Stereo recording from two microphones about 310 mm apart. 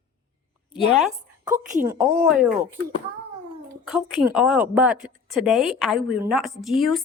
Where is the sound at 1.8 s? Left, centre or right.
Centre.